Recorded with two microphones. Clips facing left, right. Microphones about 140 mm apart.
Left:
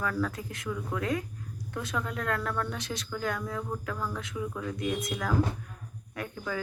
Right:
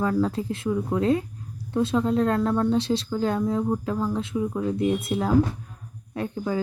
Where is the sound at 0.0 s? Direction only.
25° right (ahead or behind).